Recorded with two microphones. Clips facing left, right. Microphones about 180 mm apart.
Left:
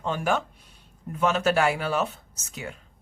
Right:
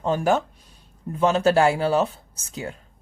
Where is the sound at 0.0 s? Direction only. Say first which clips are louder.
Right 5 dB; 40° right (ahead or behind).